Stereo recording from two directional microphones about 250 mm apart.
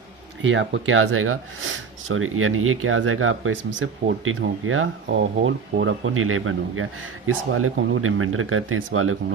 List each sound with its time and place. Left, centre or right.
0.4 s speech: right